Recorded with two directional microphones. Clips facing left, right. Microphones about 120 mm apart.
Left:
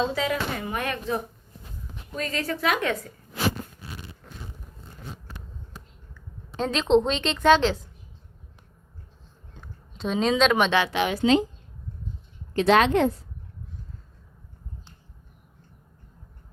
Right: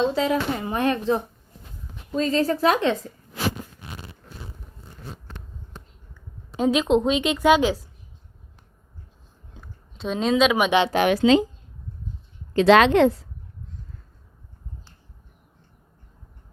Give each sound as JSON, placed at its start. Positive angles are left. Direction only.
{"t": 0.1, "sound": "a woman's voice", "side_deg": -30}
{"t": 2.4, "sound": "speech", "side_deg": -35}
{"t": 5.3, "sound": "a sound", "side_deg": 10}
{"t": 6.6, "sound": "a woman's voice", "side_deg": -10}
{"t": 9.6, "sound": "a sound", "side_deg": 0}
{"t": 11.0, "sound": "a woman's voice", "side_deg": -80}
{"t": 12.6, "sound": "a woman's voice", "side_deg": -90}